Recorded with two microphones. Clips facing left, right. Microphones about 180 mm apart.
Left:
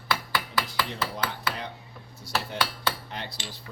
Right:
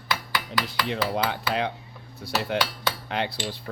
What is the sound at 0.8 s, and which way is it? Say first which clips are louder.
Speech: right 6 dB; 75° right (ahead or behind).